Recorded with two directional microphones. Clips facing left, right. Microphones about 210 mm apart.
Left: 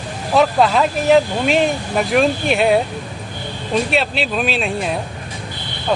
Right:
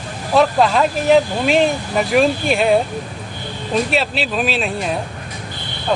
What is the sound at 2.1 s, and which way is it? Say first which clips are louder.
Speech: right 1 dB; centre (ahead or behind).